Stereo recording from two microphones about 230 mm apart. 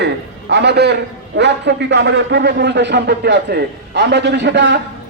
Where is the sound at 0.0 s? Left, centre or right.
Right.